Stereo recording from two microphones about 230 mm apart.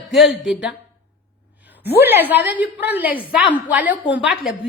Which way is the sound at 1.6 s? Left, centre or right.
Centre.